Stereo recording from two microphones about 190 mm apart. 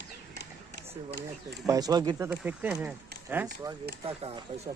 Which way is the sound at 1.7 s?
20° right (ahead or behind).